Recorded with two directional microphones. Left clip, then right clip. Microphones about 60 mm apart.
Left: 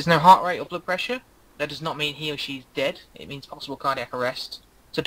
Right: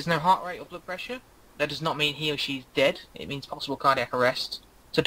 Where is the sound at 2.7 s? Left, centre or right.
Right.